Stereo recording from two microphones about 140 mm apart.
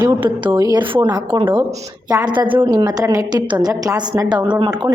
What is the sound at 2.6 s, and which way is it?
A woman's voice, 25° right (ahead or behind).